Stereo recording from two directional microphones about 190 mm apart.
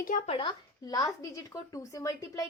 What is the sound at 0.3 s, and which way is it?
Speech, 25° left (ahead or behind).